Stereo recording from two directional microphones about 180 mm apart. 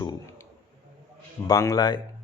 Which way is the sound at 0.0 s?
20° left (ahead or behind).